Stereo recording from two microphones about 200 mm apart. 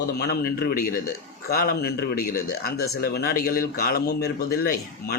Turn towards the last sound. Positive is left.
turn(degrees=50)  # may be behind; listen again after turning